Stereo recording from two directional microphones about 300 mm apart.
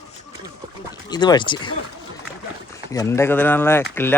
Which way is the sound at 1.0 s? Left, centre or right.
Centre.